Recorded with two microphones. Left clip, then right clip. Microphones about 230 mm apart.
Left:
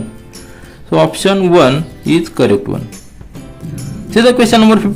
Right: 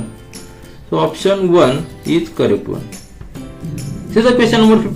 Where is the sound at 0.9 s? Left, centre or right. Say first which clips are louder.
Left 3 dB; left.